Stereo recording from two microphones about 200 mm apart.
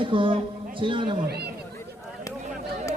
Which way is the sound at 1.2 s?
55° right (ahead or behind).